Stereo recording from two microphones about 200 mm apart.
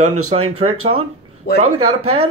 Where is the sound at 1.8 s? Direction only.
90° right.